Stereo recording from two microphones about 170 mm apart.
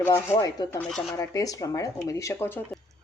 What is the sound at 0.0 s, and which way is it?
Speech, 15° left (ahead or behind).